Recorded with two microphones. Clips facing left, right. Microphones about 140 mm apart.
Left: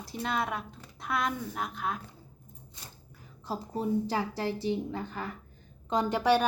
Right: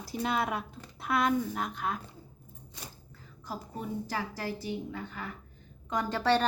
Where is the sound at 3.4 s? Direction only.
25° left (ahead or behind).